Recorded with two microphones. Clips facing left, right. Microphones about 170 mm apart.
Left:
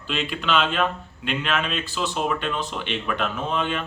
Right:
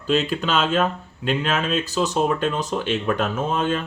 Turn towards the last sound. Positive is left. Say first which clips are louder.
# right 3 dB
turn(degrees=-40)  # may be behind; listen again after turning